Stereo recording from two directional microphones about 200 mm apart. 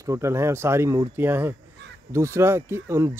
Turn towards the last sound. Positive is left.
turn(degrees=-15)  # may be behind; listen again after turning